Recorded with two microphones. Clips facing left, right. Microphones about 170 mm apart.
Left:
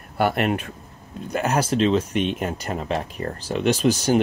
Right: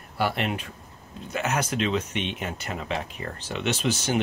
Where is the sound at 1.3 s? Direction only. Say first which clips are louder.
Left 5 dB; 35° left (ahead or behind).